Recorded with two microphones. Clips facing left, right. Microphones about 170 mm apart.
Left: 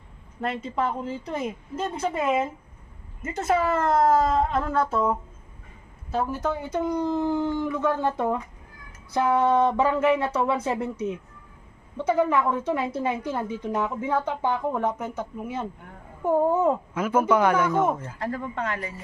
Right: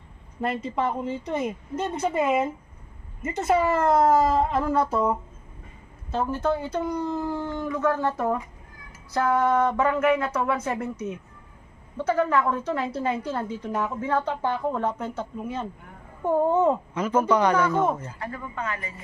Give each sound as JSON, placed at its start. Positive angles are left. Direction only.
{"t": 0.4, "sound": "speech", "side_deg": 0}
{"t": 6.1, "sound": "a woman's voice", "side_deg": 10}
{"t": 17.9, "sound": "speech", "side_deg": -10}